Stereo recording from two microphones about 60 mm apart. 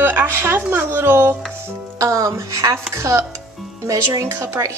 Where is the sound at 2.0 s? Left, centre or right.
Right.